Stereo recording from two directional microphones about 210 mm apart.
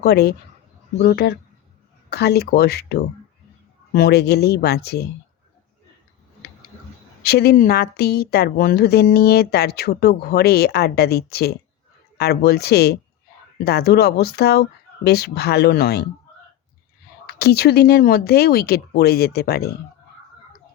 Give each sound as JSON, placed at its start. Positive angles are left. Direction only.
{"t": 0.0, "sound": "speech", "side_deg": 50}
{"t": 7.2, "sound": "speech", "side_deg": 50}
{"t": 17.2, "sound": "speech", "side_deg": 50}